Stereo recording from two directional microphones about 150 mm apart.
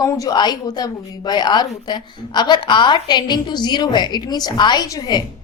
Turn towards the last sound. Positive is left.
turn(degrees=30)  # may be behind; listen again after turning